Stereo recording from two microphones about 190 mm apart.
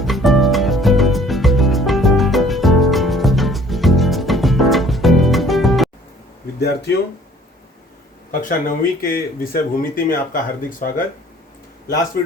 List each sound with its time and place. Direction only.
0.0 s music: centre (ahead or behind)
6.6 s speech: 60° left (ahead or behind)
8.3 s speech: 45° left (ahead or behind)